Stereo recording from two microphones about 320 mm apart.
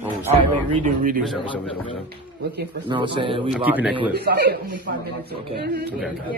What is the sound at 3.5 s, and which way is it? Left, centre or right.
Speech, centre.